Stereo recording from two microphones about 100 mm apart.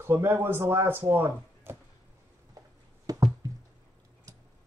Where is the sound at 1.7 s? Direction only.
25° right (ahead or behind).